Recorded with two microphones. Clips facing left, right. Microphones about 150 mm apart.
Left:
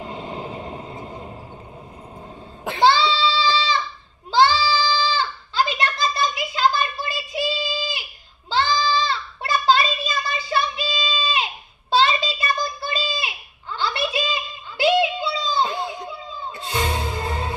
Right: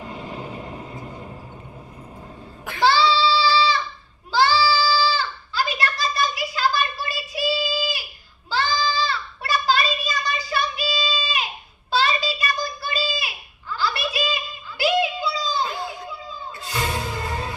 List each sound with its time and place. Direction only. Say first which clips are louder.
0.0 s vehicle: left 2 dB; 25° left (ahead or behind)
2.6 s goat: left 1 dB; 25° left (ahead or behind)
8.5 s child singing: left 3 dB; 25° left (ahead or behind)
11.9 s a sound: left 3 dB; 25° left (ahead or behind)